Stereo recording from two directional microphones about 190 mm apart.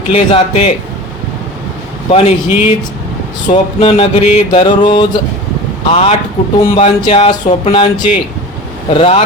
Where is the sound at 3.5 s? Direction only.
30° left (ahead or behind).